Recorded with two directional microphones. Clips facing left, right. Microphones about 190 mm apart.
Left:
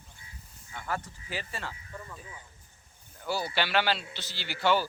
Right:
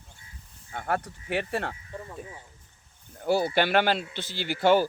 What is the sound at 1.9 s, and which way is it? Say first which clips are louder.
Speech: right 4 dB; 30° right (ahead or behind).